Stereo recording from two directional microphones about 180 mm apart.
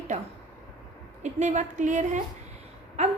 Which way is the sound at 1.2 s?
40° right (ahead or behind).